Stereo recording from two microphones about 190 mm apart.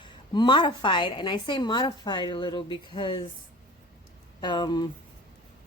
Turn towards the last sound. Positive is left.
turn(degrees=20)  # may be behind; listen again after turning